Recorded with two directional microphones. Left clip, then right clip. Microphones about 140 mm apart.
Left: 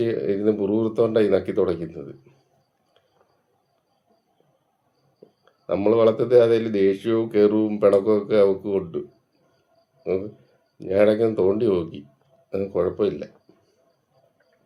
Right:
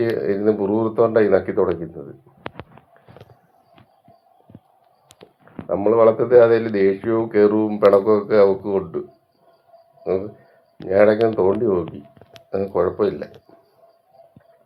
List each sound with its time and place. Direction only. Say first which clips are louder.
0.0 s speech: right 3 dB; 20° left (ahead or behind)
5.6 s speech: right 3 dB; 35° left (ahead or behind)
10.8 s speech: right 4 dB; 25° left (ahead or behind)